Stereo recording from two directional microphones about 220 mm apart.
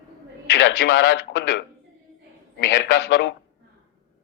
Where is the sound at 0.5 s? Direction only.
55° left (ahead or behind).